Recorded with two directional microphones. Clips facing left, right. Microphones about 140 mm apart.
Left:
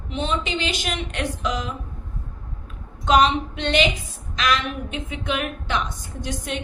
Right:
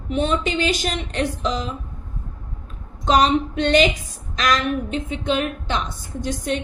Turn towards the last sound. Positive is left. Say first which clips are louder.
# right 5 dB
turn(degrees=-40)  # may be behind; listen again after turning